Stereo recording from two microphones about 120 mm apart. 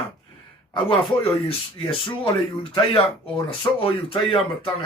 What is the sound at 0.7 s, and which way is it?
A man's voice, 45° left (ahead or behind).